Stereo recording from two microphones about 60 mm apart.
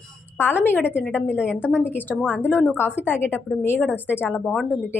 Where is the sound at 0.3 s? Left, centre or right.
Left.